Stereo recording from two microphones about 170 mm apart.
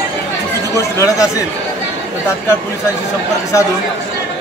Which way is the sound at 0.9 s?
20° left (ahead or behind).